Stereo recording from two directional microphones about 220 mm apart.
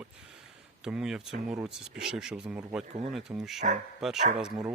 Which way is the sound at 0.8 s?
5° right (ahead or behind).